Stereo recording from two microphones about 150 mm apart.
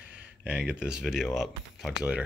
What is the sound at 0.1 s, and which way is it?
Speech, 10° right (ahead or behind).